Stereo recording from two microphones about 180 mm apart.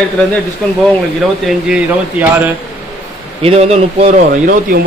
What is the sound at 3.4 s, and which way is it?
A man's voice, 35° right (ahead or behind).